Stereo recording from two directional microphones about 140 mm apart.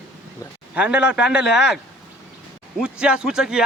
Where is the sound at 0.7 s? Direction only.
10° right (ahead or behind).